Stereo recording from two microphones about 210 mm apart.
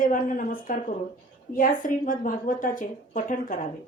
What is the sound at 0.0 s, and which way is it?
Speech, 40° left (ahead or behind).